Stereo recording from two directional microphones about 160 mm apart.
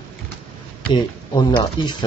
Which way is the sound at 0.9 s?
30° left (ahead or behind).